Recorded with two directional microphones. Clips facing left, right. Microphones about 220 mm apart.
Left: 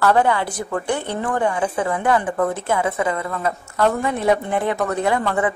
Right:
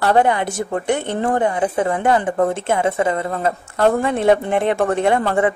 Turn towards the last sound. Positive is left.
turn(degrees=-25)  # may be behind; listen again after turning